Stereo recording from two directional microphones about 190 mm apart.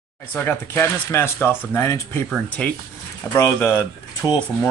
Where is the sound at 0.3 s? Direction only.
10° left (ahead or behind).